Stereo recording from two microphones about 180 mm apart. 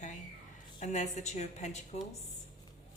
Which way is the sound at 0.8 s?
40° left (ahead or behind).